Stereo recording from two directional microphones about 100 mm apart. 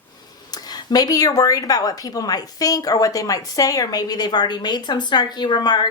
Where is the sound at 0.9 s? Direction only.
40° left (ahead or behind).